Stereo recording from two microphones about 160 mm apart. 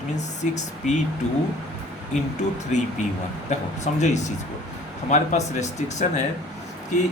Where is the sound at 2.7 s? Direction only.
45° left (ahead or behind).